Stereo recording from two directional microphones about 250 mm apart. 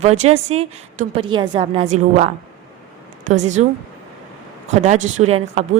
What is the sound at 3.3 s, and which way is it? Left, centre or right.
Speech, right.